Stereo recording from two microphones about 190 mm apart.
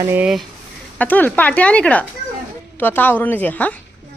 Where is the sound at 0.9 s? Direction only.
10° left (ahead or behind).